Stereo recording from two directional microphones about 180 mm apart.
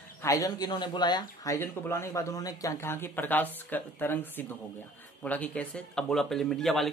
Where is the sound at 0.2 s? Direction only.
20° left (ahead or behind).